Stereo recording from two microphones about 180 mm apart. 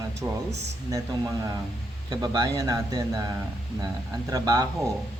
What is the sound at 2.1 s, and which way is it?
Speech, 20° right (ahead or behind).